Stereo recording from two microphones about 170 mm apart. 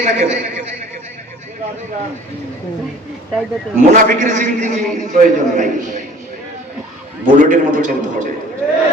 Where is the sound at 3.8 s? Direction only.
50° right (ahead or behind).